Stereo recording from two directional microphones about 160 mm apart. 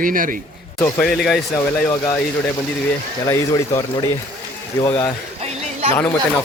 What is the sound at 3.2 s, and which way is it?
Speech, 20° left (ahead or behind).